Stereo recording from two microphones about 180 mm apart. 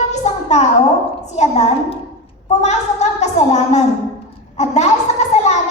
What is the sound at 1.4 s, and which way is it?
A woman's voice, 35° left (ahead or behind).